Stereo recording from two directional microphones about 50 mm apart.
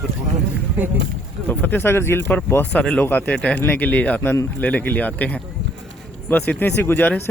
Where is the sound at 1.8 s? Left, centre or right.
Left.